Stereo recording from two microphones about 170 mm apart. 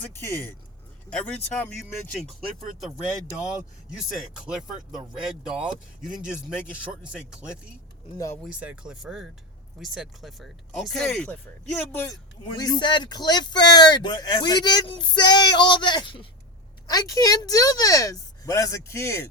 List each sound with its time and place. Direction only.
1.1 s speech: 5° left (ahead or behind)
3.8 s speech: 5° right (ahead or behind)
8.4 s speech: 10° right (ahead or behind)
12.0 s speech: 25° left (ahead or behind)